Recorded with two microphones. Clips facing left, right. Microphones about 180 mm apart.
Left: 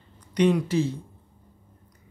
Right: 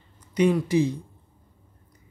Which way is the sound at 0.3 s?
5° right (ahead or behind).